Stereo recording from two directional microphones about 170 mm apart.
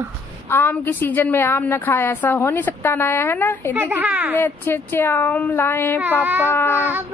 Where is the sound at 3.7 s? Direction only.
10° right (ahead or behind).